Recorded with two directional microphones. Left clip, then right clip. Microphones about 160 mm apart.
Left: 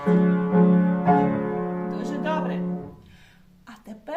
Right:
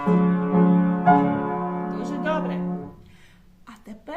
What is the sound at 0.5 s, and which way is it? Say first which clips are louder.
Music: even; 30° right (ahead or behind).